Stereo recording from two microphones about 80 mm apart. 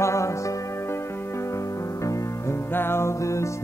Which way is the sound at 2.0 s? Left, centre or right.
Left.